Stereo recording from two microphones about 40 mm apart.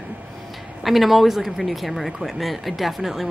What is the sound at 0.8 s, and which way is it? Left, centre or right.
Speech, centre.